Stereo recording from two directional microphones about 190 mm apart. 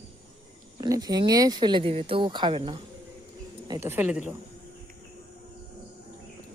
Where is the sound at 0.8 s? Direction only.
20° right (ahead or behind).